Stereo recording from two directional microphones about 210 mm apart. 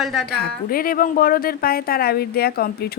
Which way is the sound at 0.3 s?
45° left (ahead or behind).